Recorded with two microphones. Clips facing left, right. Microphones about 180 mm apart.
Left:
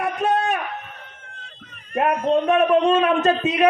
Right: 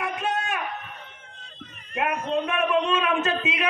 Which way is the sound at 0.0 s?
35° left (ahead or behind).